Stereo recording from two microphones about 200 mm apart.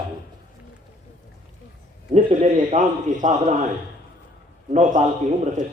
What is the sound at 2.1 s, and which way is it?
A man's voice, 35° right (ahead or behind).